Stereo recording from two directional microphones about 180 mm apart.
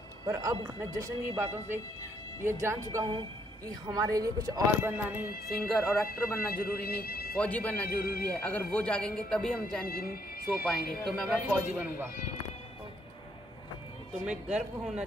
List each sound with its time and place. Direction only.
0.3 s speech: 15° right (ahead or behind)
4.9 s speech: 10° right (ahead or behind)
6.0 s a man's voice: 55° left (ahead or behind)
7.3 s speech: 10° left (ahead or behind)
7.9 s a man's voice: 55° left (ahead or behind)
8.3 s speech: 10° left (ahead or behind)
9.8 s a man's voice: 55° left (ahead or behind)
11.1 s speech: centre (ahead or behind)
14.2 s speech: 5° right (ahead or behind)